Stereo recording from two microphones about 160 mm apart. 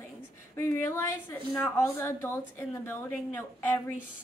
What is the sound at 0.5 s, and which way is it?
A woman's voice, 15° left (ahead or behind).